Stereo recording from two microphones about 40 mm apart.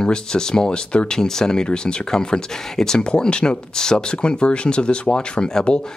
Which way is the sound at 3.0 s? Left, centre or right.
Left.